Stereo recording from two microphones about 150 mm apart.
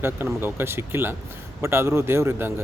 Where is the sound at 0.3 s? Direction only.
15° right (ahead or behind).